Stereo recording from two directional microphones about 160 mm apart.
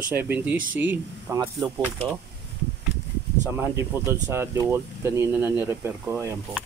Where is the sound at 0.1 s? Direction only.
10° right (ahead or behind).